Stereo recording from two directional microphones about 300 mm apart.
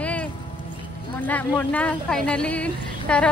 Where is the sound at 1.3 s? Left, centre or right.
Centre.